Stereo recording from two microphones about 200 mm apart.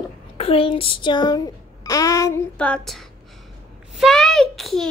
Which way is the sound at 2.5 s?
5° left (ahead or behind).